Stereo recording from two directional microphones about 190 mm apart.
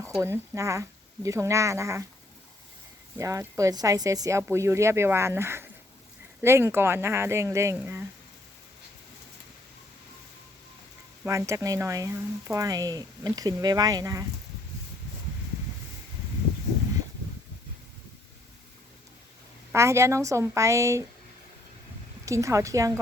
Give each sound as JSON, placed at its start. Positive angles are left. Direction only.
{"t": 0.2, "sound": "speech", "side_deg": -15}
{"t": 3.2, "sound": "speech", "side_deg": -15}
{"t": 11.3, "sound": "speech", "side_deg": -15}
{"t": 19.7, "sound": "speech", "side_deg": -15}
{"t": 22.3, "sound": "speech", "side_deg": -15}